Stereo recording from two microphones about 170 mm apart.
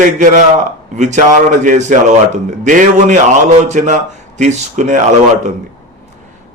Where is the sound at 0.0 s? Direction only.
50° right (ahead or behind).